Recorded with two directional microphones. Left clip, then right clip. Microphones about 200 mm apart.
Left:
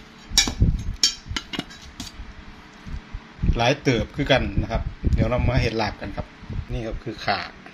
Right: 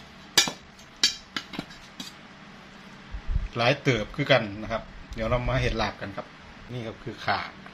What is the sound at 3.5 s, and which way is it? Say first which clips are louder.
A man's voice: left 3 dB; 15° left (ahead or behind).